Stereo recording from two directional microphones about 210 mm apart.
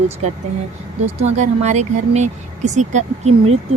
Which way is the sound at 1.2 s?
35° right (ahead or behind).